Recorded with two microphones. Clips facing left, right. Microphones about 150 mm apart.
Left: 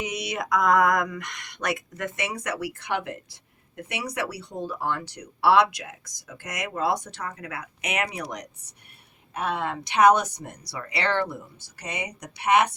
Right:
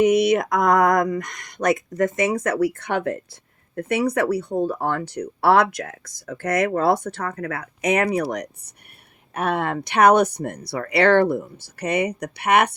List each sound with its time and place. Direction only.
0.0 s speech: 55° right (ahead or behind)
9.3 s speech: 60° right (ahead or behind)